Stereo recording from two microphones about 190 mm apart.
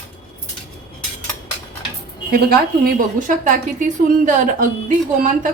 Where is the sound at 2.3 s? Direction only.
55° right (ahead or behind).